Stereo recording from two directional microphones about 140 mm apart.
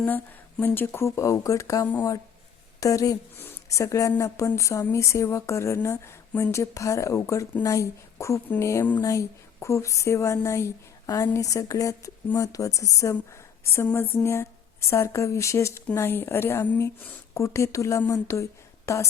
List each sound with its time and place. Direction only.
0.0 s speech: 10° left (ahead or behind)